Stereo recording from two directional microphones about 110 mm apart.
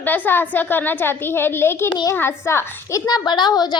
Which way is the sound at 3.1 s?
40° left (ahead or behind).